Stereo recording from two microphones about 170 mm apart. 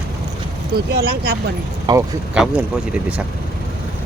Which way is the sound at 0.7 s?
70° right (ahead or behind).